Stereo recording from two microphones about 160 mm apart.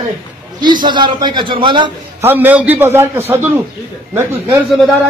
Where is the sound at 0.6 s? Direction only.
30° right (ahead or behind).